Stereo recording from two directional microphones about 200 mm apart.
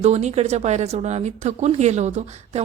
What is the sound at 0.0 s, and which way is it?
Speech, 35° right (ahead or behind).